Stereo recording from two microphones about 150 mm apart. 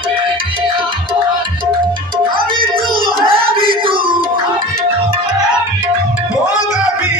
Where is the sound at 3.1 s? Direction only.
35° right (ahead or behind).